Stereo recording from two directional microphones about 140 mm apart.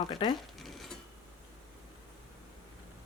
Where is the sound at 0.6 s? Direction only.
Centre (ahead or behind).